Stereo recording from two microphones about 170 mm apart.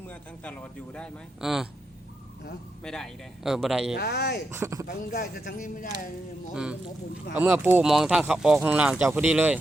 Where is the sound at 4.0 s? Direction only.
75° left (ahead or behind).